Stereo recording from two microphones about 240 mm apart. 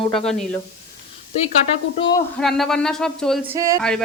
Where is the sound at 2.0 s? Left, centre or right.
Centre.